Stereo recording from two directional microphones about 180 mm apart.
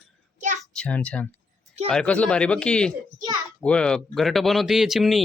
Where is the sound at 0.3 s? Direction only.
45° right (ahead or behind).